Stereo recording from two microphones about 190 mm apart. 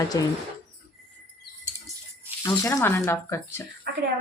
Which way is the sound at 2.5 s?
15° left (ahead or behind).